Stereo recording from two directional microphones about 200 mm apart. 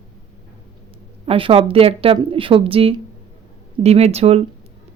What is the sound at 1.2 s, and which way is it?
Speech, 25° right (ahead or behind).